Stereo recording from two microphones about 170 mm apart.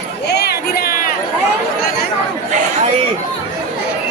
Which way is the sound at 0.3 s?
75° left (ahead or behind).